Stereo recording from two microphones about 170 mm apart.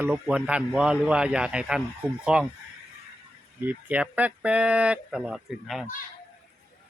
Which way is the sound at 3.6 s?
10° right (ahead or behind).